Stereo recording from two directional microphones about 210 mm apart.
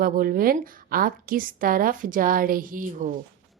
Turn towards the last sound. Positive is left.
turn(degrees=-40)  # may be behind; listen again after turning